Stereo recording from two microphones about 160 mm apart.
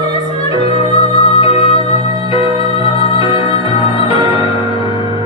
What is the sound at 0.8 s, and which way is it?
Music, 35° left (ahead or behind).